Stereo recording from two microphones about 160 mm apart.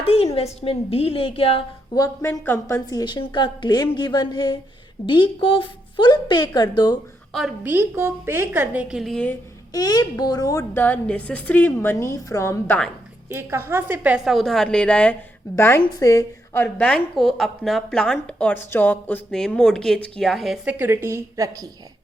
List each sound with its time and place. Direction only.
0.0 s a sound: 35° left (ahead or behind)
0.3 s a woman's voice: 40° left (ahead or behind)
2.0 s a woman's voice: 20° left (ahead or behind)
7.6 s a woman's voice: 10° right (ahead or behind); by 9.3 s 5° left (ahead or behind)
9.7 s a woman's voice: 25° left (ahead or behind)
13.2 s a woman's voice: 15° right (ahead or behind)
20.7 s a woman's voice: 15° right (ahead or behind)